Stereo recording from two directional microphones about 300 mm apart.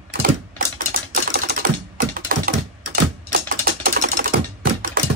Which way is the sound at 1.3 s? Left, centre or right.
Right.